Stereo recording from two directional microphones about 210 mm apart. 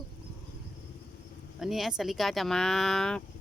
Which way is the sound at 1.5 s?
Centre (ahead or behind).